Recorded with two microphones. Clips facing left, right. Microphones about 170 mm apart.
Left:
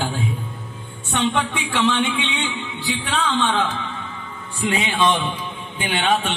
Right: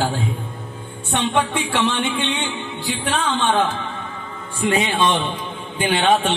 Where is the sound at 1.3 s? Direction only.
55° right (ahead or behind).